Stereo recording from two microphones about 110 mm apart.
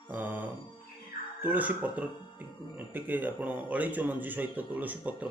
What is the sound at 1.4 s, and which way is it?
Speech, 15° right (ahead or behind).